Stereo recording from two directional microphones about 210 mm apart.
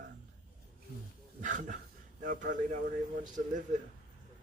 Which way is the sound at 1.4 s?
35° right (ahead or behind).